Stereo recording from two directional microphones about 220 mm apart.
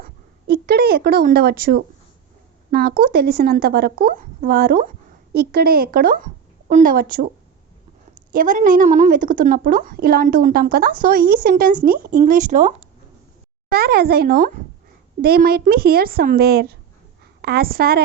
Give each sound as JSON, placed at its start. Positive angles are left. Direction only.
{"t": 0.4, "sound": "a woman's voice", "side_deg": -45}
{"t": 8.3, "sound": "a woman's voice", "side_deg": -40}